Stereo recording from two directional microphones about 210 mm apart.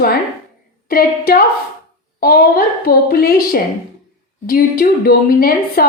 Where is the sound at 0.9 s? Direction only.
45° left (ahead or behind).